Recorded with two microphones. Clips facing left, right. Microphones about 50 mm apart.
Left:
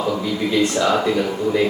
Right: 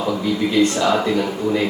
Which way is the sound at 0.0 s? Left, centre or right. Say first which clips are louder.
Right 1 dB; centre.